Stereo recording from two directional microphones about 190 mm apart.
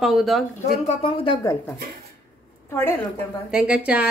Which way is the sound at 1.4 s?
15° left (ahead or behind).